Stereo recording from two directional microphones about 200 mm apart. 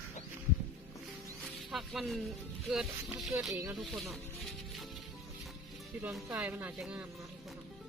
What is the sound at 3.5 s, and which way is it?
Speech, 15° right (ahead or behind).